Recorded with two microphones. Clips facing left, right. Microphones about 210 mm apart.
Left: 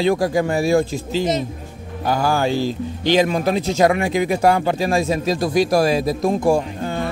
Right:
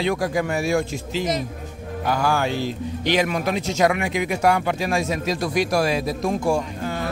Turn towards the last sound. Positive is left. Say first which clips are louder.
# left 4 dB
turn(degrees=40)  # may be behind; listen again after turning